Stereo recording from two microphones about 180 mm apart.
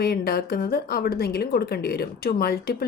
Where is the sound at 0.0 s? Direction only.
60° left (ahead or behind).